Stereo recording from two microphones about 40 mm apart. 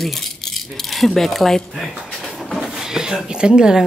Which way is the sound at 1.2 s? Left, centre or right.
Centre.